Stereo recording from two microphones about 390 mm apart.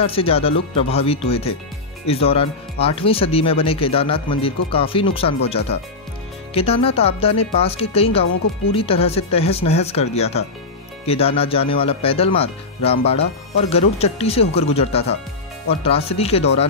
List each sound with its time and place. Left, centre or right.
0.0 s speech: centre